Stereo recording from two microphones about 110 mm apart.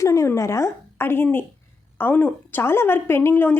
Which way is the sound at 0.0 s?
25° left (ahead or behind).